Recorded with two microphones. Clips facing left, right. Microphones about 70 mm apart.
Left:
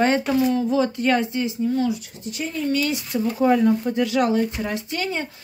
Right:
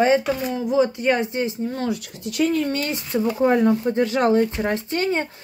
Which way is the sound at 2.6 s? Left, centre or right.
Right.